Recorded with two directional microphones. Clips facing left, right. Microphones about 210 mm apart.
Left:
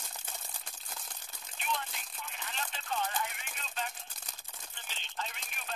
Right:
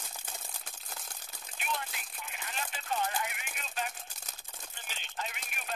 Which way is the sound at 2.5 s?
10° right (ahead or behind).